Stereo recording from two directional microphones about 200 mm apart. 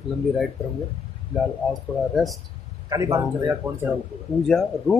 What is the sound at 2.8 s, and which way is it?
Speech, 15° right (ahead or behind).